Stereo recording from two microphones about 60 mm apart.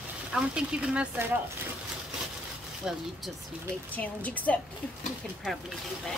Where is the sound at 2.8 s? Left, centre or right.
Centre.